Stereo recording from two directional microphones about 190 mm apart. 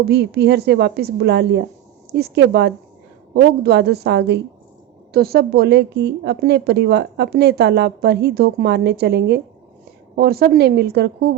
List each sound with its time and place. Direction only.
0.1 s a woman's voice: 60° right (ahead or behind)